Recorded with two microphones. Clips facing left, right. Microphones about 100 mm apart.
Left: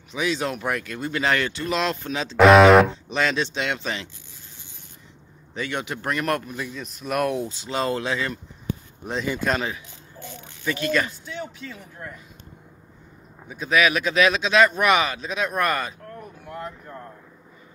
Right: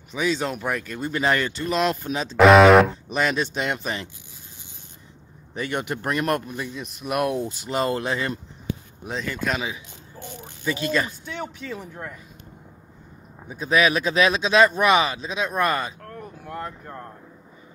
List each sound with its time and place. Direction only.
0.1 s speech: centre (ahead or behind)
6.0 s speech: 20° right (ahead or behind)
9.2 s speech: 10° left (ahead or behind)
9.5 s speech: 5° right (ahead or behind)
10.6 s speech: 20° right (ahead or behind)
13.5 s speech: 30° right (ahead or behind)